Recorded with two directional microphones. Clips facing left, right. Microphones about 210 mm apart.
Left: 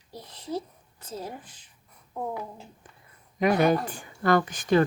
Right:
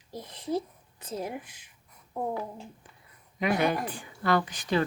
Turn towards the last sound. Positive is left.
turn(degrees=50)  # may be behind; listen again after turning